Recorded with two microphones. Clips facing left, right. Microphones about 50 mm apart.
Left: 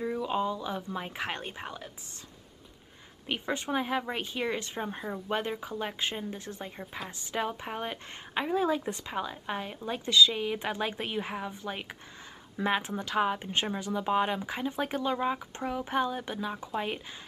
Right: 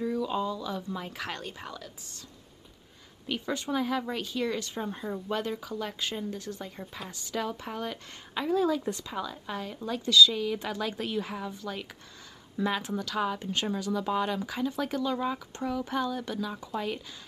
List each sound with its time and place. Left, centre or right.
0.0 s speech: left
3.3 s speech: left